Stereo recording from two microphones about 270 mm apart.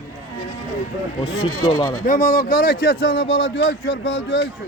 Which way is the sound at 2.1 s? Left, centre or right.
Left.